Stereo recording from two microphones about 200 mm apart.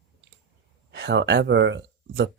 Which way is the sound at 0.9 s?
60° right (ahead or behind).